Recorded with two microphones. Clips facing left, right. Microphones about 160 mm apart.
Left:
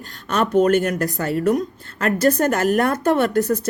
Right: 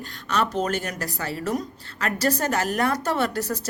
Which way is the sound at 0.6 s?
55° left (ahead or behind).